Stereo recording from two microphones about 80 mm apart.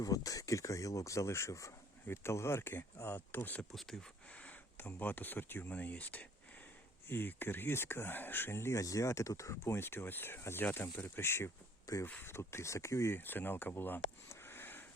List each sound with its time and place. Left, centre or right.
0.0 s speech: left
3.7 s speech: centre
4.3 s speech: centre; by 13.1 s left
13.1 s speech: left
14.4 s a sound: left